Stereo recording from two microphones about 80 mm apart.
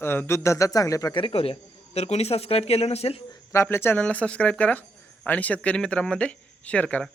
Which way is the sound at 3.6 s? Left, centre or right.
Left.